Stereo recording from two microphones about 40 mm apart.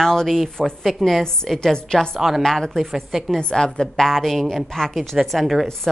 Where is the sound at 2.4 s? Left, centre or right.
Centre.